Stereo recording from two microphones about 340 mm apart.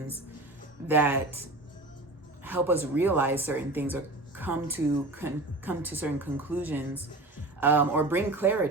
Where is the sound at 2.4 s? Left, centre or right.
Centre.